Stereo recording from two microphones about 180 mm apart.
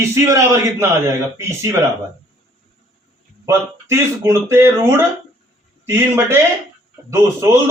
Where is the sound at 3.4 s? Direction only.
15° right (ahead or behind).